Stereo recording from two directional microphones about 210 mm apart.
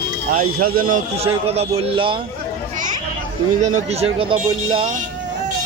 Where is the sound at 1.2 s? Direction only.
30° right (ahead or behind).